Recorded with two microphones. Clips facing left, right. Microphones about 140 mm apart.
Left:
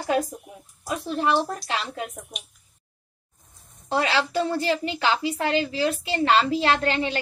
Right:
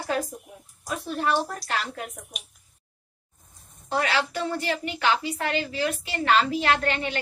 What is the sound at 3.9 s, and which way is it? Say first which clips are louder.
A woman's voice: left 2 dB; 25° left (ahead or behind).